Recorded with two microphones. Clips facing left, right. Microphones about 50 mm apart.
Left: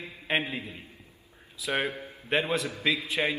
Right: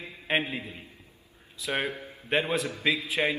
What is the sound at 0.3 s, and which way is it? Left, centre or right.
A man's voice, centre.